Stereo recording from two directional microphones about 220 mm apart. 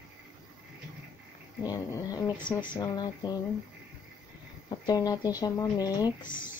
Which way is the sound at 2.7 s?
20° left (ahead or behind).